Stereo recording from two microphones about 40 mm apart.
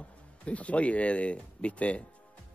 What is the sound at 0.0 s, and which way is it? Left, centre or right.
Speech, left.